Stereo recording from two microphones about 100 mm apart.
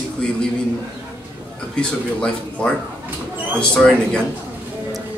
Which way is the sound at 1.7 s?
10° left (ahead or behind).